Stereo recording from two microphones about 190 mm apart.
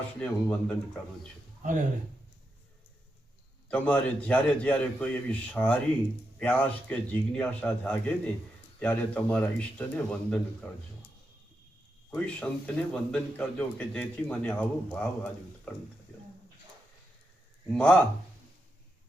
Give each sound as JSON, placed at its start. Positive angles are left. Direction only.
{"t": 0.2, "sound": "speech", "side_deg": 5}
{"t": 1.6, "sound": "speech", "side_deg": -40}
{"t": 3.7, "sound": "a man's voice", "side_deg": 5}
{"t": 12.1, "sound": "a man's voice", "side_deg": 5}
{"t": 17.7, "sound": "speech", "side_deg": 5}